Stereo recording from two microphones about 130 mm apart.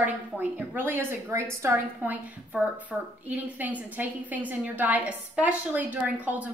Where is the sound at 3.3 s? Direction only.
10° right (ahead or behind).